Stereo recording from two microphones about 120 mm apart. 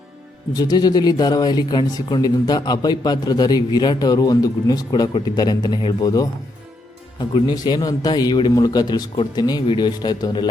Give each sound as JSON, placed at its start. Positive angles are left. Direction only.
{"t": 0.5, "sound": "speech", "side_deg": 35}
{"t": 7.2, "sound": "speech", "side_deg": 45}
{"t": 7.5, "sound": "speech", "side_deg": 30}